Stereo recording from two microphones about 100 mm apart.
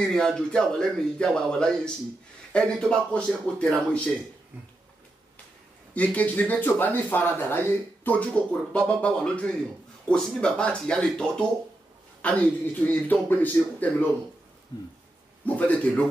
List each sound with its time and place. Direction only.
0.1 s speech: 5° left (ahead or behind)
5.9 s speech: 15° left (ahead or behind)
15.4 s speech: 15° left (ahead or behind)